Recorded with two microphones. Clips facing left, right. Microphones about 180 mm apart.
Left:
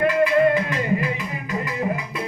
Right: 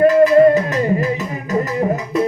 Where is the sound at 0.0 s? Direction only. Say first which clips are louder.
Right 8 dB; 40° right (ahead or behind).